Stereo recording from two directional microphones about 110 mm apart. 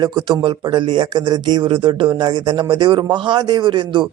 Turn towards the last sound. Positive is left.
turn(degrees=-45)  # may be behind; listen again after turning